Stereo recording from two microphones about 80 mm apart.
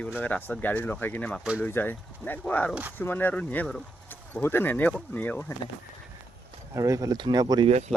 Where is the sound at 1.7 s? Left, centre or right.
Left.